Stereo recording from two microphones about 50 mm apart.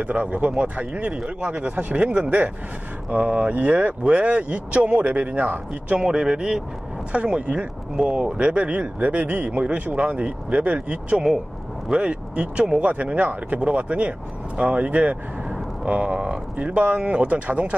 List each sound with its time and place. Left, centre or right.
0.0 s speech: right
1.5 s speech: right
5.7 s speech: centre